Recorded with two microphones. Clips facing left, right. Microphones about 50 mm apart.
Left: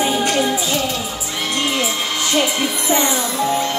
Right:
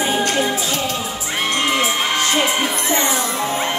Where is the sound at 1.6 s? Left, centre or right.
Right.